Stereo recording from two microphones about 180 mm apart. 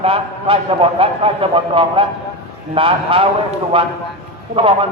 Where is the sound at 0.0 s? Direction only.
30° right (ahead or behind).